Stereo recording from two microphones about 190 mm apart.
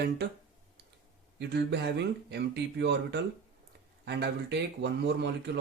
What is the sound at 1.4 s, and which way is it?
Speech, 65° right (ahead or behind).